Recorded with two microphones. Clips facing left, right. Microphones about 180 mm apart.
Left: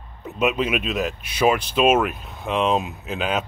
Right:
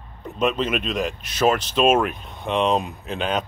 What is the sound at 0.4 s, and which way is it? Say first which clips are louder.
Speech: left 1 dB; 10° left (ahead or behind).